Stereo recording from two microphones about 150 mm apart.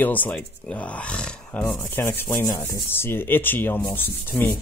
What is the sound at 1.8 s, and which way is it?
Rub, 15° left (ahead or behind).